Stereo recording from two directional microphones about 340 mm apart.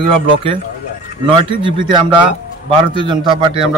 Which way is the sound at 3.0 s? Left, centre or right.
Centre.